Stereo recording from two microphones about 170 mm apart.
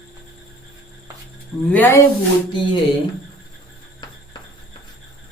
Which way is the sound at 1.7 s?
10° left (ahead or behind).